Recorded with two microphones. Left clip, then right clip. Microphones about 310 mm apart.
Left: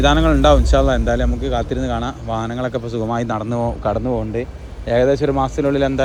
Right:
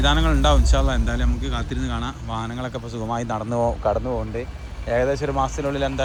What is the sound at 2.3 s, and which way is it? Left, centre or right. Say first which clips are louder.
Speech: left 9 dB; left.